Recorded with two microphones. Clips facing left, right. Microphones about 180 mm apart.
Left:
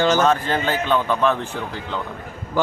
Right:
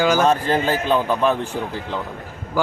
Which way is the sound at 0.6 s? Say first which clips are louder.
Right 1 dB; 35° right (ahead or behind).